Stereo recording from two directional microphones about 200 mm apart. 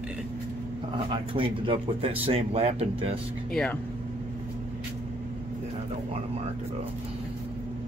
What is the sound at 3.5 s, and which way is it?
Speech, 5° left (ahead or behind).